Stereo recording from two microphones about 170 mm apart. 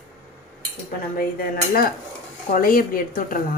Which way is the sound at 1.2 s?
60° left (ahead or behind).